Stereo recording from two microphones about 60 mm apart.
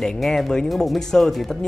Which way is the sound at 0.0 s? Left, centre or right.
Centre.